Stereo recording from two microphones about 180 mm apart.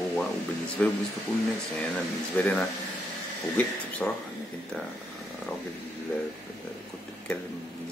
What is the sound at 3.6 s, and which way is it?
Speech, 10° left (ahead or behind).